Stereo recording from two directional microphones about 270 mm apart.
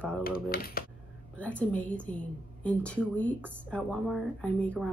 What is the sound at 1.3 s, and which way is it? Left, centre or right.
A woman's voice, centre.